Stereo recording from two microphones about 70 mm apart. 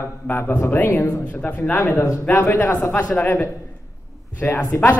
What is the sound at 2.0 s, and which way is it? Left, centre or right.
Speech, left.